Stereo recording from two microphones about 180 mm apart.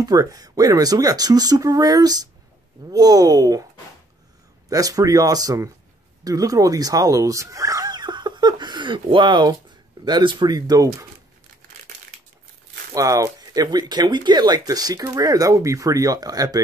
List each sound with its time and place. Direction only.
0.0 s speech: 20° right (ahead or behind)
4.6 s speech: 20° right (ahead or behind)
12.9 s speech: 20° right (ahead or behind)